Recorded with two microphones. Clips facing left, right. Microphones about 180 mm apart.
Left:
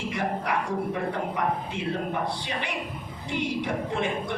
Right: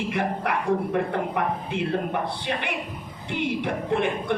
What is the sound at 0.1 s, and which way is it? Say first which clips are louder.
A woman's voice: left 1 dB; 60° right (ahead or behind).